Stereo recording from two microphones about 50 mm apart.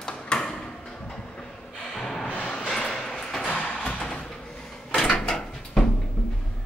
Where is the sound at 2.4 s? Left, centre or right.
Centre.